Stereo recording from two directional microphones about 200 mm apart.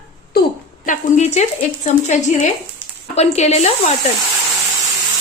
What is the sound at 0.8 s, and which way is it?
Speech, 35° left (ahead or behind).